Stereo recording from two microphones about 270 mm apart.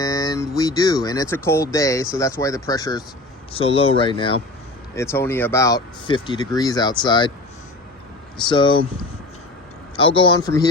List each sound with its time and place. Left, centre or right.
0.0 s speech: centre
8.4 s speech: centre
10.0 s speech: centre